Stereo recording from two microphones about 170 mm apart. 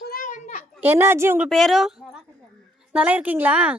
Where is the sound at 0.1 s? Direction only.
50° left (ahead or behind).